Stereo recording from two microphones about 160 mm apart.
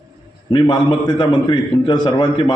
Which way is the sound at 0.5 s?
30° left (ahead or behind).